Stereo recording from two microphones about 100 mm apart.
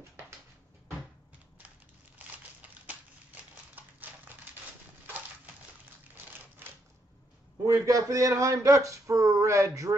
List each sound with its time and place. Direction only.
2.1 s crumpling: 15° right (ahead or behind)
3.7 s a sound: 20° right (ahead or behind)
7.6 s speech: 30° right (ahead or behind)